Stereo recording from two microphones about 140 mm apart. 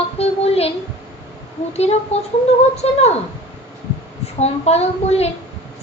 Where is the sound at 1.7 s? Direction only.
50° left (ahead or behind).